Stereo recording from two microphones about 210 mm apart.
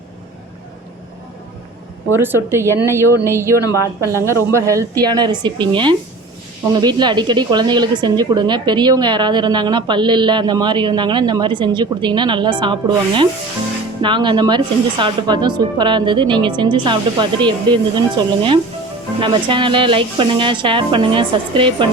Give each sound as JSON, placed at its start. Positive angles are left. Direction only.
{"t": 2.1, "sound": "speech", "side_deg": -10}
{"t": 3.6, "sound": "speech", "side_deg": 15}
{"t": 4.0, "sound": "speech", "side_deg": -15}